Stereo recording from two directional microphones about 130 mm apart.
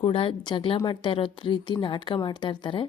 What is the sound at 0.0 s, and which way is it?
A woman's voice, 45° left (ahead or behind).